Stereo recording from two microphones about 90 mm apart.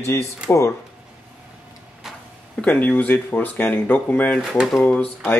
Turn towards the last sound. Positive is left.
turn(degrees=15)  # may be behind; listen again after turning